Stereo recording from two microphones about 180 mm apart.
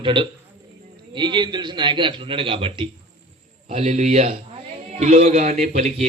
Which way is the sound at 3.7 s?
40° right (ahead or behind).